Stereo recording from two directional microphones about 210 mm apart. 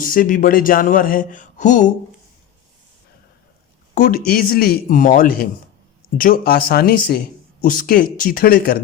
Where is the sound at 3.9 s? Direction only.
40° left (ahead or behind).